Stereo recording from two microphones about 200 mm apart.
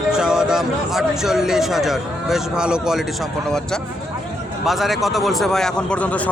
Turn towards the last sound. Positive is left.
turn(degrees=5)  # may be behind; listen again after turning